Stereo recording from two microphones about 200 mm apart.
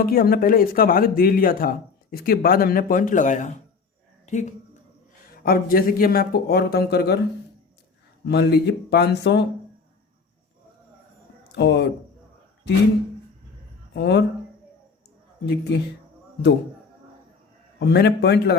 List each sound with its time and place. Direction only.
0.0 s speech: 45° left (ahead or behind)
4.3 s a sound: 35° left (ahead or behind)
5.3 s speech: 45° left (ahead or behind)
8.2 s speech: 55° left (ahead or behind)
11.5 s a man's voice: 60° left (ahead or behind)
13.9 s a man's voice: 55° left (ahead or behind)
15.4 s a man's voice: 55° left (ahead or behind)
17.7 s a man's voice: 55° left (ahead or behind)